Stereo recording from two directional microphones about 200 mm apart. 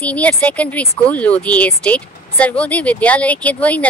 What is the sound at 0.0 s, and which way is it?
Speech, 5° left (ahead or behind).